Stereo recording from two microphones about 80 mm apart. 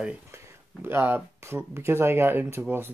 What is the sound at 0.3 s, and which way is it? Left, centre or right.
Speech, right.